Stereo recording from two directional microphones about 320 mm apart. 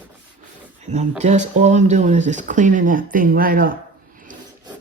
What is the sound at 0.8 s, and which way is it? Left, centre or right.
Speech, right.